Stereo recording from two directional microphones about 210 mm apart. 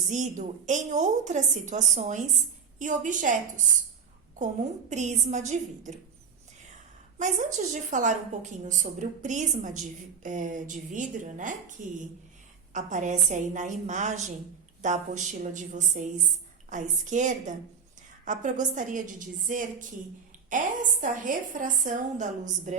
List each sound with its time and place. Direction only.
0.1 s a woman's voice: 35° right (ahead or behind)
4.9 s a woman's voice: 35° right (ahead or behind)
7.2 s a woman's voice: 35° right (ahead or behind)